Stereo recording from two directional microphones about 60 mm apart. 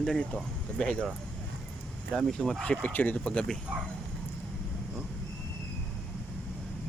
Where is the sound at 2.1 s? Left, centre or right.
Centre.